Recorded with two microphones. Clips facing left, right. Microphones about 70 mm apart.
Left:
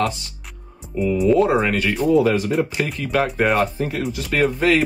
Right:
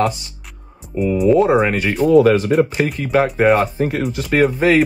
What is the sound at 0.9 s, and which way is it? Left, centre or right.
Speech, centre.